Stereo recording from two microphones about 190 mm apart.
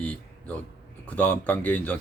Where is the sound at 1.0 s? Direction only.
10° left (ahead or behind).